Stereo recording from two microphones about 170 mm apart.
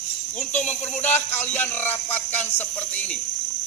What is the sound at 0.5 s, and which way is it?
Speech, 45° left (ahead or behind).